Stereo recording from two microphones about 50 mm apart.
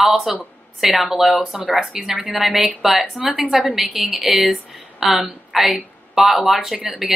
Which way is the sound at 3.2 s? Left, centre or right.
Right.